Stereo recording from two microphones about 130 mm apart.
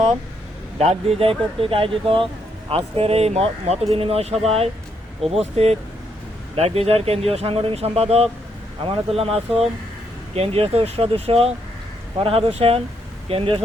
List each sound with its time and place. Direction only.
0.8 s speech: 50° right (ahead or behind)